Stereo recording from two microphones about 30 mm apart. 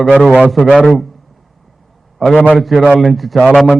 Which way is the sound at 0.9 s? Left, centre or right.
Centre.